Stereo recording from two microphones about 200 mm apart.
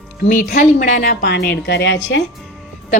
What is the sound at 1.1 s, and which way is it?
A woman's voice, 55° left (ahead or behind).